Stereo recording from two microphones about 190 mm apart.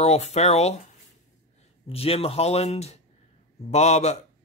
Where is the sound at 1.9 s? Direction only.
30° left (ahead or behind).